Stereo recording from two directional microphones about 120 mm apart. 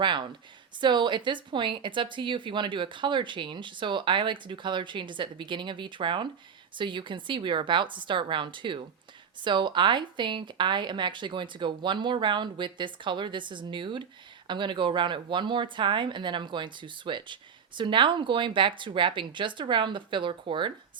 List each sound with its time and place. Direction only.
0.0 s a woman's voice: 40° right (ahead or behind)